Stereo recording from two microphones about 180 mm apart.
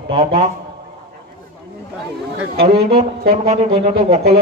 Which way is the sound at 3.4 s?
40° right (ahead or behind).